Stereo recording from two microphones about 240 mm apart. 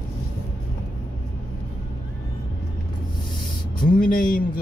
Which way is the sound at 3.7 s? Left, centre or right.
Left.